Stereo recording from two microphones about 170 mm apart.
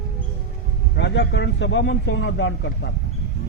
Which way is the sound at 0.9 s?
90° left.